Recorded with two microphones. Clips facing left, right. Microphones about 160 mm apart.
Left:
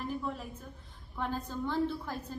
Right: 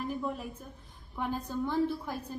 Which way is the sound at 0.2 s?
15° right (ahead or behind).